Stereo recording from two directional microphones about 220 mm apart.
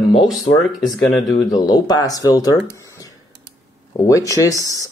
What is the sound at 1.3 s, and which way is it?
Speech, 15° left (ahead or behind).